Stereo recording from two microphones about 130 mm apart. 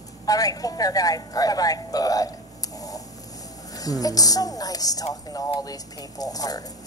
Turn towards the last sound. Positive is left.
turn(degrees=30)  # may be behind; listen again after turning